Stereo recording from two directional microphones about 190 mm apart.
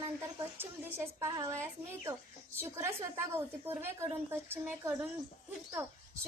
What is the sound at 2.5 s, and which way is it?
A woman's voice, 15° right (ahead or behind).